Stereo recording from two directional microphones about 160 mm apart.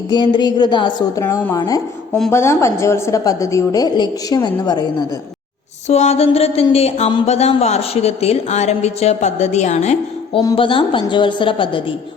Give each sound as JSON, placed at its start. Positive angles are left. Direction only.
{"t": 0.1, "sound": "a woman's voice", "side_deg": 25}
{"t": 5.9, "sound": "speech", "side_deg": 45}
{"t": 10.4, "sound": "a woman's voice", "side_deg": 30}